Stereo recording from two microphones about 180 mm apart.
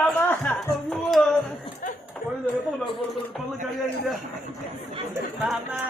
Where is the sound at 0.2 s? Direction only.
10° left (ahead or behind).